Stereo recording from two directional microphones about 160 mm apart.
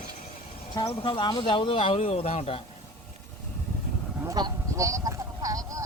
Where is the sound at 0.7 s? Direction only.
25° left (ahead or behind).